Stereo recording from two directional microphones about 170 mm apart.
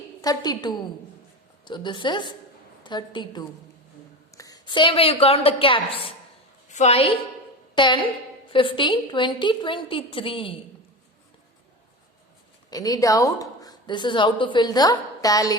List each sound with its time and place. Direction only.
0.2 s a woman's voice: 25° left (ahead or behind)
6.7 s a woman's voice: 45° left (ahead or behind)
12.7 s a woman's voice: 20° left (ahead or behind)